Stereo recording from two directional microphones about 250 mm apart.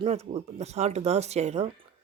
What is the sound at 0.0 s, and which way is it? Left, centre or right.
Speech, right.